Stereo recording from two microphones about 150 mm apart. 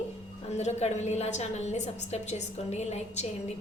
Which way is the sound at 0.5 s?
50° left (ahead or behind).